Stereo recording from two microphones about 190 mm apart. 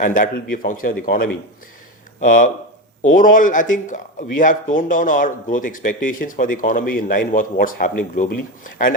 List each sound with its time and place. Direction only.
0.0 s speech: 45° left (ahead or behind)